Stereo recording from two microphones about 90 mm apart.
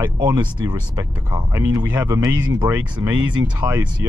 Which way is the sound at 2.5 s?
40° right (ahead or behind).